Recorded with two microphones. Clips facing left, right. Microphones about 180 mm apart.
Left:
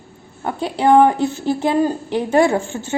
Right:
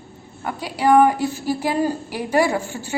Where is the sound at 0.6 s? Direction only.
25° left (ahead or behind).